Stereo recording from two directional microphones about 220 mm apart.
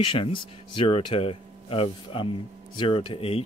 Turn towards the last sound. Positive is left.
turn(degrees=25)  # may be behind; listen again after turning